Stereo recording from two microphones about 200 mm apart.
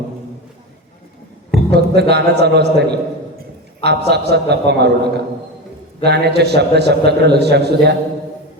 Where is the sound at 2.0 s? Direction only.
55° right (ahead or behind).